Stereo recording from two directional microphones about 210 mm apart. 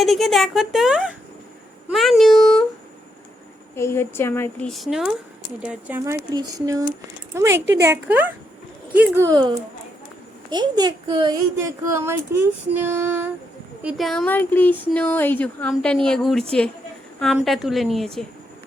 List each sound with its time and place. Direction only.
0.0 s speech: centre (ahead or behind)
3.8 s speech: 10° left (ahead or behind)
4.7 s speech: centre (ahead or behind)
13.8 s speech: centre (ahead or behind)